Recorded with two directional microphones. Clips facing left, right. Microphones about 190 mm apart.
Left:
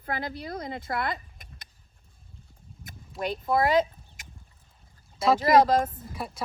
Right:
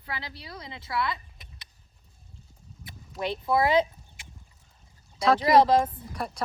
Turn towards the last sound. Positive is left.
turn(degrees=5)  # may be behind; listen again after turning